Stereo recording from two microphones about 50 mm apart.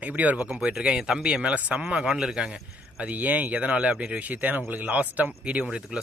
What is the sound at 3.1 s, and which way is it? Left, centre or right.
Speech, right.